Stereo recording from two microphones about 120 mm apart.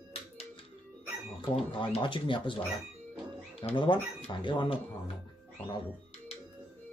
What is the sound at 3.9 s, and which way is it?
Speech, 45° left (ahead or behind).